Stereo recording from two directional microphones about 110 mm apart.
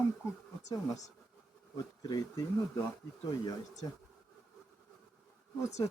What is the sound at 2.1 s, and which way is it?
Speech, 35° left (ahead or behind).